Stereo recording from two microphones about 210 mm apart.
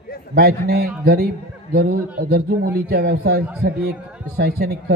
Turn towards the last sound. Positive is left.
turn(degrees=-50)  # may be behind; listen again after turning